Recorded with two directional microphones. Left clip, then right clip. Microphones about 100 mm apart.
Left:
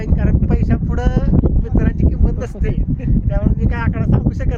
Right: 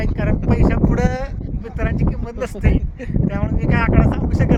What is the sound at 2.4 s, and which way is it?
Speech, 45° left (ahead or behind).